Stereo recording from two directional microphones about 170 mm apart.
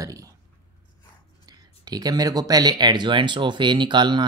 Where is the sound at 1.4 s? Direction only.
25° right (ahead or behind).